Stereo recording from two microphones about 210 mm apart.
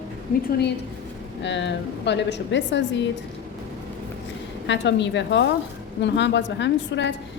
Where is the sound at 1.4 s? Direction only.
55° left (ahead or behind).